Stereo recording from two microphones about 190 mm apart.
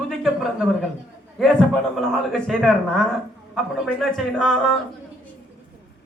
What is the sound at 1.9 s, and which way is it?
A man's voice, centre (ahead or behind).